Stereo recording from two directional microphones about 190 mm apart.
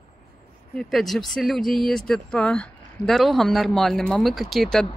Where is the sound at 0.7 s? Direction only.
Centre (ahead or behind).